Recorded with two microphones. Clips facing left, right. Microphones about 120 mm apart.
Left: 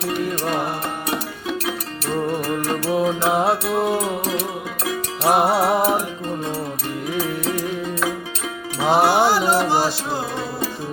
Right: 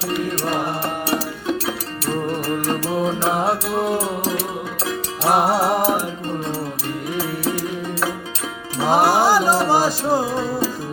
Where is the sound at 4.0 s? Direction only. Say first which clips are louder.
Even; 35° right (ahead or behind).